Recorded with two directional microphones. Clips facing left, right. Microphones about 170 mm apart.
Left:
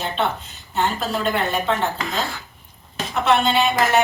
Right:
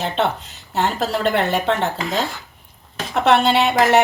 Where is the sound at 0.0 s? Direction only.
75° right (ahead or behind).